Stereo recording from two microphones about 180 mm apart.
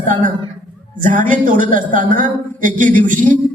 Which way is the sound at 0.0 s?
45° right (ahead or behind).